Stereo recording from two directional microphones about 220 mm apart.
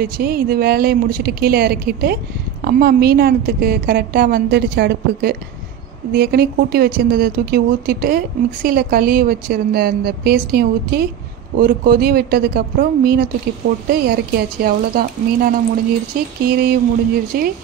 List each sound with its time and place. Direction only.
0.0 s a woman's voice: 45° right (ahead or behind)